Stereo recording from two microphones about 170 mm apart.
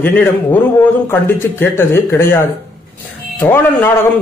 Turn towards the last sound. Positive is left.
turn(degrees=15)  # may be behind; listen again after turning